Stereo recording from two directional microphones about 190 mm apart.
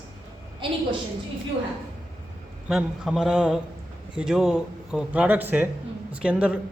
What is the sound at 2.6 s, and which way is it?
A woman's voice, centre (ahead or behind).